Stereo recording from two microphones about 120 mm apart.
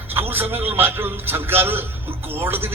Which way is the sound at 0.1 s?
20° right (ahead or behind).